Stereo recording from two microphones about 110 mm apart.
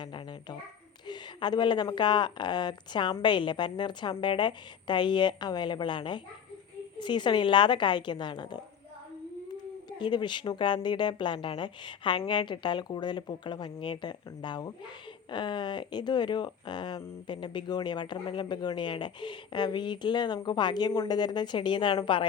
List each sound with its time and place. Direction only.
0.0 s babbling: 45° left (ahead or behind)
1.0 s speech: 40° left (ahead or behind)
10.0 s speech: 45° left (ahead or behind)